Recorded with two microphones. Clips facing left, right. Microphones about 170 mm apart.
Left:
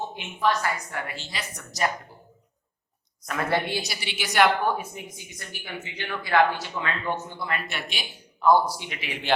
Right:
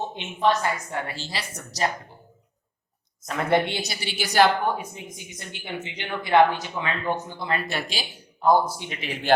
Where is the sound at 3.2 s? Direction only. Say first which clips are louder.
Right 4 dB; 25° right (ahead or behind).